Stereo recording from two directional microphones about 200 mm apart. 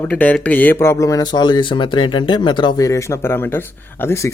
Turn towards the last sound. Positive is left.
turn(degrees=15)  # may be behind; listen again after turning